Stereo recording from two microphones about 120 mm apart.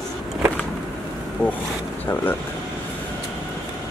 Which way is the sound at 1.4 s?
10° left (ahead or behind).